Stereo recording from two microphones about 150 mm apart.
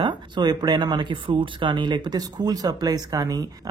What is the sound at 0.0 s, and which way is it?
Speech, 25° right (ahead or behind).